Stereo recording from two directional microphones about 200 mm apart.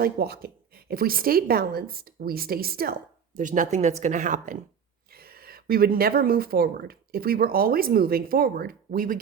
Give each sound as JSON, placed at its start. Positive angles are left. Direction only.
{"t": 0.0, "sound": "speech", "side_deg": -50}
{"t": 5.1, "sound": "speech", "side_deg": -50}